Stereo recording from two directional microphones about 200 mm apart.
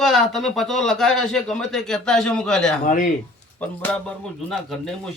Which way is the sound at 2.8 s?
40° left (ahead or behind).